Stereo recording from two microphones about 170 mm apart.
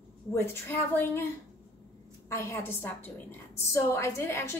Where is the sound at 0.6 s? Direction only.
10° left (ahead or behind).